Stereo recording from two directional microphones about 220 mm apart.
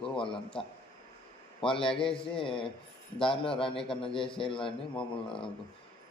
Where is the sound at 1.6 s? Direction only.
25° left (ahead or behind).